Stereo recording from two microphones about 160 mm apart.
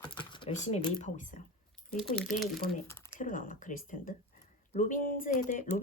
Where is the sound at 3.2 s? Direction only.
55° left (ahead or behind).